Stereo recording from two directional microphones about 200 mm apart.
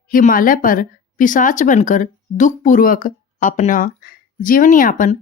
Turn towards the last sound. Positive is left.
turn(degrees=40)  # may be behind; listen again after turning